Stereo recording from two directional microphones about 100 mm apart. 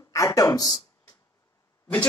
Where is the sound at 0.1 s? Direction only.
35° left (ahead or behind).